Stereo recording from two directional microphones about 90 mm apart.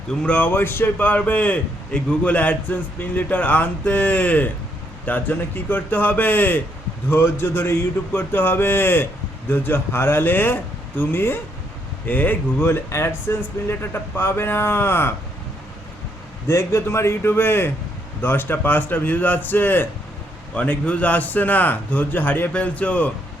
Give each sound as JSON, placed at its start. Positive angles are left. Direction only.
{"t": 0.1, "sound": "a man's voice", "side_deg": 10}
{"t": 16.5, "sound": "a man's voice", "side_deg": 30}